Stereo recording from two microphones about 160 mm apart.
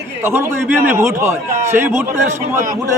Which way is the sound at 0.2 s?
15° right (ahead or behind).